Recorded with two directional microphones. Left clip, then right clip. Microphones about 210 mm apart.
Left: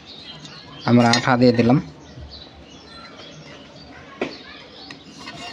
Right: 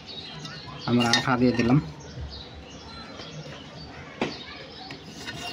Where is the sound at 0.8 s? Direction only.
55° left (ahead or behind).